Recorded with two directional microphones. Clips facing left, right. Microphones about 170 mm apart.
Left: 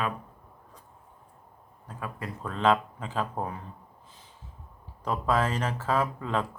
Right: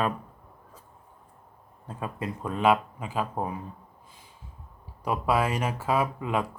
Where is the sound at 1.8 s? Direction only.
20° right (ahead or behind).